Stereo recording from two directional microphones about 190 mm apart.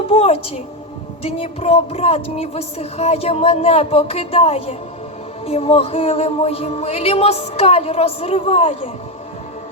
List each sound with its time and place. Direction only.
0.1 s speech: 30° left (ahead or behind)